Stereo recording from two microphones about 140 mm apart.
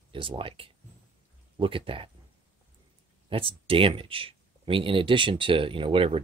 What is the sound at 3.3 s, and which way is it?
Speech, 40° right (ahead or behind).